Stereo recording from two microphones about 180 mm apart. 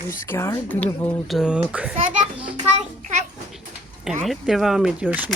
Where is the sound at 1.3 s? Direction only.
5° right (ahead or behind).